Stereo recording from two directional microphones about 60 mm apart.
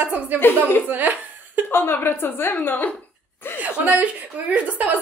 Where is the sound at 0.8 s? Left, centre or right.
Right.